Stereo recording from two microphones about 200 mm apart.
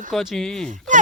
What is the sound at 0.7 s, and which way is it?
Speech, 40° right (ahead or behind).